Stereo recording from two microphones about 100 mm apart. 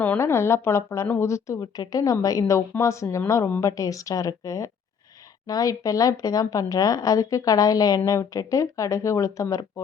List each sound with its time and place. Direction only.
0.2 s a woman's voice: 25° left (ahead or behind)